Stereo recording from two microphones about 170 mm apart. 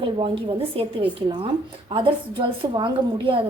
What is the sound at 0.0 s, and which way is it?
A woman's voice, 30° right (ahead or behind).